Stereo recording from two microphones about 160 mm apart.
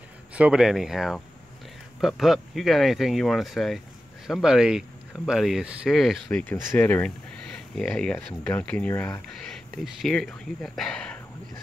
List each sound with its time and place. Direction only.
0.3 s speech: 5° right (ahead or behind); by 9.2 s 15° left (ahead or behind)
10.0 s speech: centre (ahead or behind)